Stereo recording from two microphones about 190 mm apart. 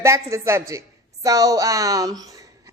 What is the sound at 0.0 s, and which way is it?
A woman's voice, 15° right (ahead or behind).